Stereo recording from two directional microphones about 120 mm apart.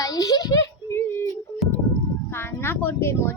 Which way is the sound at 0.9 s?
20° left (ahead or behind).